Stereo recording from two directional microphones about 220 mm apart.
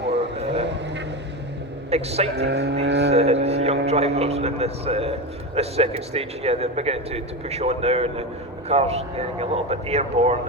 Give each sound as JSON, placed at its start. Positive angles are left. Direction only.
{"t": 0.3, "sound": "vehicle", "side_deg": -30}
{"t": 1.9, "sound": "speech", "side_deg": -30}
{"t": 2.3, "sound": "speech", "side_deg": -50}
{"t": 3.1, "sound": "speech", "side_deg": -30}